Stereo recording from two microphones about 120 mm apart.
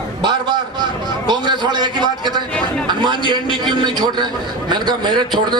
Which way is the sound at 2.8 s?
40° right (ahead or behind).